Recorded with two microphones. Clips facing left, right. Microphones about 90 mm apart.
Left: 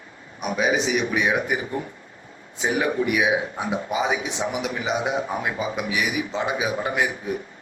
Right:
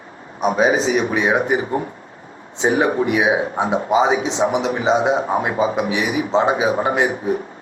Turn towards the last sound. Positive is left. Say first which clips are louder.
# right 6 dB
turn(degrees=-30)  # may be behind; listen again after turning